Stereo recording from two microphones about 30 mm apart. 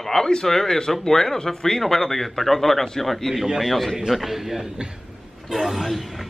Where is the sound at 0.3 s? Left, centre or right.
Centre.